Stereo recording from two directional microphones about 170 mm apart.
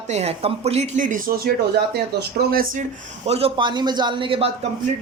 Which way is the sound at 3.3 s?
35° right (ahead or behind).